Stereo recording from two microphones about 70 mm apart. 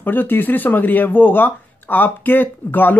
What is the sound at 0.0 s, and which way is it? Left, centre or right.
Speech, left.